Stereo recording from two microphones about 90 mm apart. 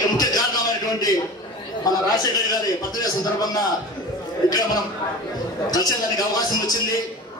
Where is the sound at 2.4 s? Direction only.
45° left (ahead or behind).